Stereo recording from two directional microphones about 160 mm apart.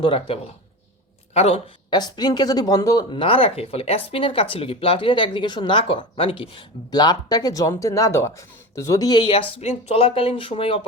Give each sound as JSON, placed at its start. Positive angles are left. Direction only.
{"t": 0.0, "sound": "speech", "side_deg": 35}